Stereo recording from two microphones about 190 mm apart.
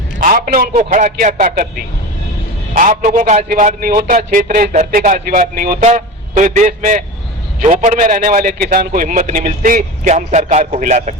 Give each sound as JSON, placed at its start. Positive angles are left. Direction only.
{"t": 0.2, "sound": "a man's voice", "side_deg": -45}